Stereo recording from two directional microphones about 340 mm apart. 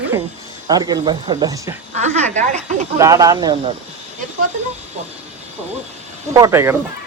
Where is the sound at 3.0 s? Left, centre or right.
Centre.